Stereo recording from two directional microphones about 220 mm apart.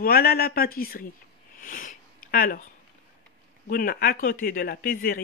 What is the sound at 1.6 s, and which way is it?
Sniff, 35° left (ahead or behind).